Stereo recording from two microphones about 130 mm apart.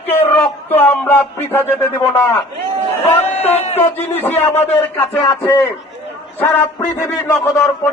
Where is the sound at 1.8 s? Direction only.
15° left (ahead or behind).